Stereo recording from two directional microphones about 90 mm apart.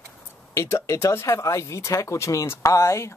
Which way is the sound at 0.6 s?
30° left (ahead or behind).